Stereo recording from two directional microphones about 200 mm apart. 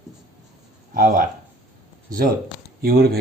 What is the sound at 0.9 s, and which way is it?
Speech, 40° right (ahead or behind).